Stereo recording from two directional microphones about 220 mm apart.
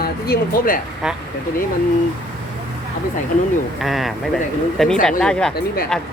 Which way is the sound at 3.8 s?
Centre (ahead or behind).